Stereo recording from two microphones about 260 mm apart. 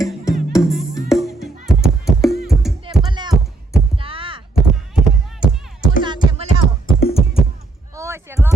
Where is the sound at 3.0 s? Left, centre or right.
Centre.